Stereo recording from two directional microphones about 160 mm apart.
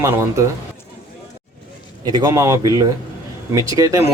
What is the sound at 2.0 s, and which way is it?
Speech, 25° right (ahead or behind).